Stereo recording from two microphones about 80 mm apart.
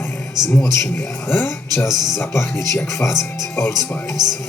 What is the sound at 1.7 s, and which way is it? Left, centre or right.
Speech, left.